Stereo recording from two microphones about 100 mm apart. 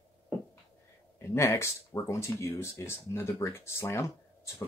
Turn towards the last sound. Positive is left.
turn(degrees=25)  # may be behind; listen again after turning